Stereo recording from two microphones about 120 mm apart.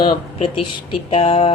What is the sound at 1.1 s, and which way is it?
Speech, 50° left (ahead or behind).